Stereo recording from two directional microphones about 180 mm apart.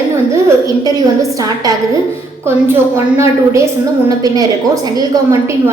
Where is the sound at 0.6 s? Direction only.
20° right (ahead or behind).